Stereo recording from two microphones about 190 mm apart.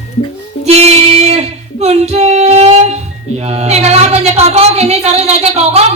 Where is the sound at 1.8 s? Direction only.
35° right (ahead or behind).